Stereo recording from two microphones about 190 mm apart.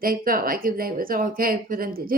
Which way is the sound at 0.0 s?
50° right (ahead or behind).